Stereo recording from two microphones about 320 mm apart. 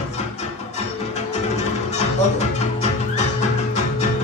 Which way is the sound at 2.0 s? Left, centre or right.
Left.